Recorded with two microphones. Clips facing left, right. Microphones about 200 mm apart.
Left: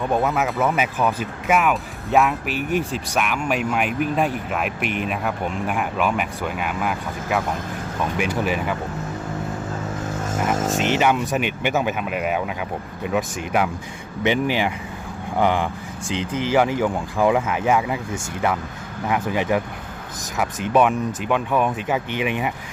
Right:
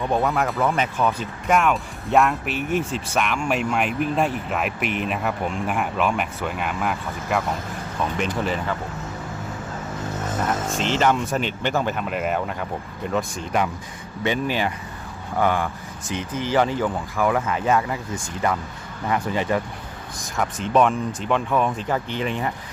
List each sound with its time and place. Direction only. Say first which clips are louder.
0.1 s speech: left 1 dB; 5° left (ahead or behind)
10.8 s speech: right 1 dB; 10° left (ahead or behind)
16.3 s speech: left 2 dB; 10° left (ahead or behind)